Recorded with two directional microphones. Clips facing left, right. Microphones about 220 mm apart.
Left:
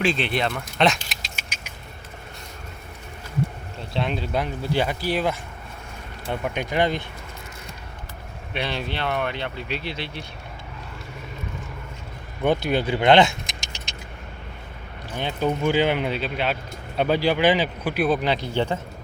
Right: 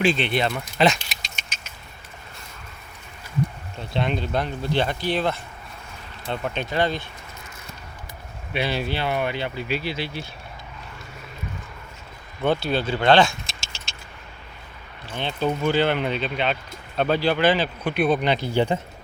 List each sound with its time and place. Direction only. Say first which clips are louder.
0.0 s speech: right 2 dB; centre (ahead or behind)
3.9 s speech: right 1 dB; centre (ahead or behind); by 7.0 s 20° left (ahead or behind)
8.5 s speech: right 3 dB; 5° right (ahead or behind)
12.4 s speech: left 1 dB; 15° left (ahead or behind)
15.1 s speech: even; 15° left (ahead or behind)
17.9 s speech: right 1 dB; 5° left (ahead or behind)